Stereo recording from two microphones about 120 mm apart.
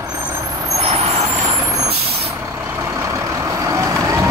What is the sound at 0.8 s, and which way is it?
Vehicle, 60° right (ahead or behind).